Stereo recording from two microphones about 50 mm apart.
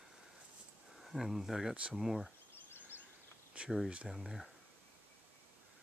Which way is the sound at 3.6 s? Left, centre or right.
Right.